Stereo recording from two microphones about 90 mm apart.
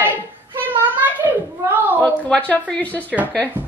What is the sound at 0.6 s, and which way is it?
Cat, 20° right (ahead or behind).